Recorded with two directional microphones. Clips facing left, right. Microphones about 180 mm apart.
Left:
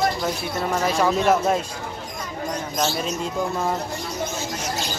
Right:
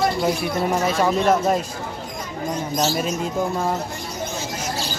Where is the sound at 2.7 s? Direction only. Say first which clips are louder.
Right 3 dB; 10° right (ahead or behind).